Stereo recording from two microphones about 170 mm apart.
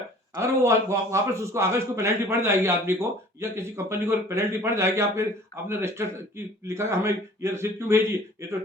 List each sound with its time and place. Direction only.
0.3 s a man's voice: 15° right (ahead or behind)